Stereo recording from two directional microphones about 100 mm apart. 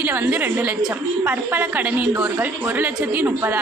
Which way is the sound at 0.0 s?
20° right (ahead or behind).